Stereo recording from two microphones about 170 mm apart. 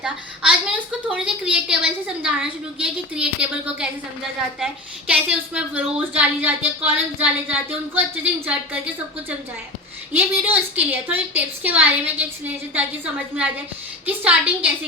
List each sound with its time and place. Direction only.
0.0 s a woman's voice: 5° right (ahead or behind)
3.8 s a woman's voice: 5° right (ahead or behind)
10.1 s a woman's voice: 10° right (ahead or behind)